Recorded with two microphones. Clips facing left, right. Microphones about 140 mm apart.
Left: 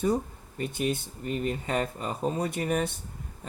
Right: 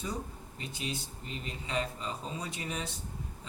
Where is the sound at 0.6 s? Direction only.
55° left (ahead or behind).